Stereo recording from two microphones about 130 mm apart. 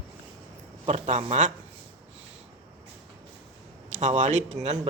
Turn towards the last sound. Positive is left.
turn(degrees=-60)  # may be behind; listen again after turning